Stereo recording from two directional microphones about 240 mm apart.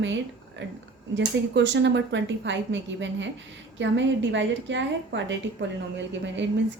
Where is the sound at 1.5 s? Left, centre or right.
Right.